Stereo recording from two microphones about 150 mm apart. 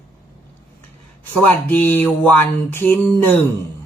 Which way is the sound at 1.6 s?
10° left (ahead or behind).